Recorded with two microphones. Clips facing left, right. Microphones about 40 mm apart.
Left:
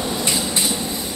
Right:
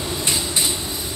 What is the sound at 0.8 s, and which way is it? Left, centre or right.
Train, left.